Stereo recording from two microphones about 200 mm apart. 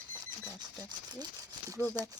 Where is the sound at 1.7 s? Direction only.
15° right (ahead or behind).